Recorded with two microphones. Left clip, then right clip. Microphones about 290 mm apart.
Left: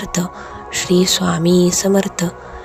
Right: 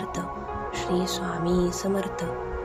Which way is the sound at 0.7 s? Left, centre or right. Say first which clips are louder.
Left 13 dB; left.